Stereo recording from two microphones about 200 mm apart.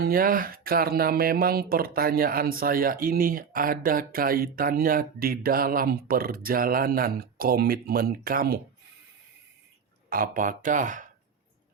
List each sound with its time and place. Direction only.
0.0 s speech: 45° right (ahead or behind)
10.1 s speech: 45° right (ahead or behind)